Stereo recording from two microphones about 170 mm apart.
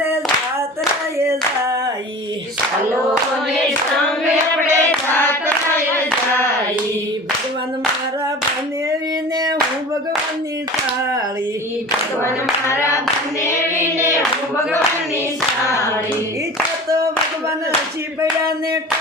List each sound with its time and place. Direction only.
4.6 s singing: 10° left (ahead or behind)
12.2 s clapping: 15° left (ahead or behind)
13.4 s child singing: 15° left (ahead or behind)